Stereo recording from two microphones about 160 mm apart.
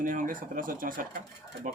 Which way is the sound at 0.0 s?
55° right (ahead or behind).